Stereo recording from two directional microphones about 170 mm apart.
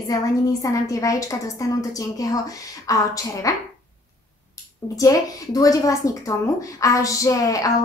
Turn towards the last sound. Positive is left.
turn(degrees=20)  # may be behind; listen again after turning